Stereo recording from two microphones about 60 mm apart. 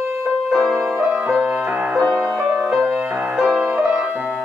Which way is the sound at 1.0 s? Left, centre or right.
Right.